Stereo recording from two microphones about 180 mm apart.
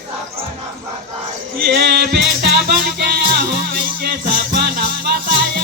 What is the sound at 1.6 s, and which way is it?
Music, 60° right (ahead or behind).